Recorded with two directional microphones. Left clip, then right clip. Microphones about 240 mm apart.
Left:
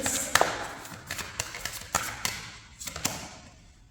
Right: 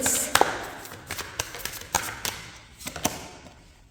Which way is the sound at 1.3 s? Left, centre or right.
Right.